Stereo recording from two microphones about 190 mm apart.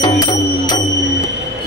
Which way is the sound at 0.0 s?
25° left (ahead or behind).